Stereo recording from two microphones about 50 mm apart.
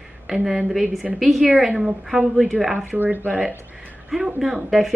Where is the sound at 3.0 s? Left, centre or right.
Right.